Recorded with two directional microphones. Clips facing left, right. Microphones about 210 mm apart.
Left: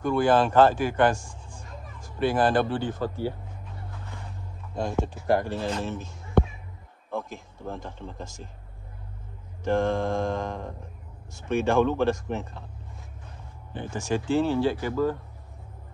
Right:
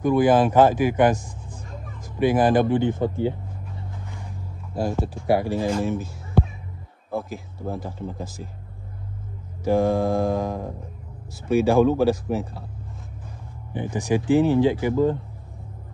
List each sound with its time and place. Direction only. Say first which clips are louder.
0.0 s speech: right 4 dB; 10° right (ahead or behind)
4.7 s speech: right 3 dB; 5° right (ahead or behind)
7.2 s speech: right 4 dB; 5° right (ahead or behind)
9.7 s speech: right 4 dB; 5° right (ahead or behind)
13.7 s speech: right 5 dB; 15° right (ahead or behind)